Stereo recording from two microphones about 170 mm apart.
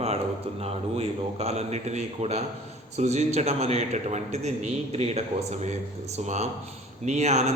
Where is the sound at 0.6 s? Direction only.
40° right (ahead or behind).